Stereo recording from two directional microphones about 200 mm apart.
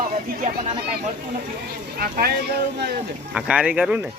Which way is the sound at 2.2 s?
50° right (ahead or behind).